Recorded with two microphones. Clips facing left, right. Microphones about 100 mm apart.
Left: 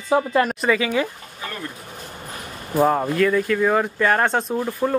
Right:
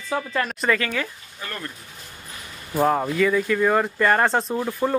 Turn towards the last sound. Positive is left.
turn(degrees=0)  # may be behind; listen again after turning